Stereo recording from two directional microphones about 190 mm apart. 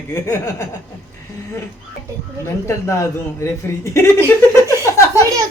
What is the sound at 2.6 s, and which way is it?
A man's voice, 15° left (ahead or behind).